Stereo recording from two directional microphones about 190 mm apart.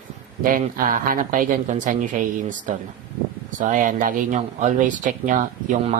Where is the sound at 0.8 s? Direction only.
45° right (ahead or behind).